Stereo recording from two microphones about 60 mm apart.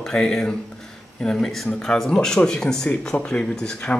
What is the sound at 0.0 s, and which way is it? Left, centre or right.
Speech, centre.